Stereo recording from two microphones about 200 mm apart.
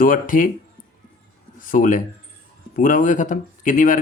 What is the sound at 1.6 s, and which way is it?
Speech, 40° left (ahead or behind).